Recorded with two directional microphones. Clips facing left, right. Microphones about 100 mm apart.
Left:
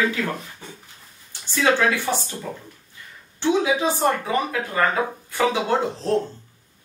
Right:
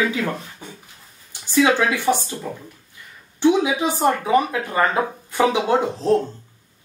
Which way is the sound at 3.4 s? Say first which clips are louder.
Right 3 dB; 15° right (ahead or behind).